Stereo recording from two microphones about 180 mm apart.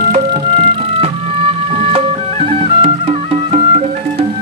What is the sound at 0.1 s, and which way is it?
Music, 30° right (ahead or behind).